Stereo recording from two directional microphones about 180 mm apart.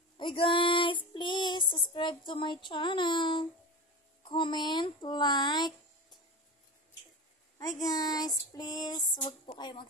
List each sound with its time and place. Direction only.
0.2 s female singing: 30° left (ahead or behind)
4.2 s child singing: 25° left (ahead or behind)
7.5 s child singing: 20° left (ahead or behind)